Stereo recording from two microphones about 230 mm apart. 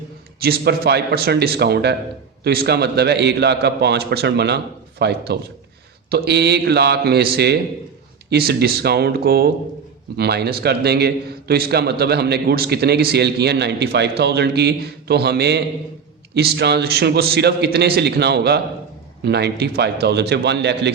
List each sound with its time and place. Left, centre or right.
0.4 s a man's voice: right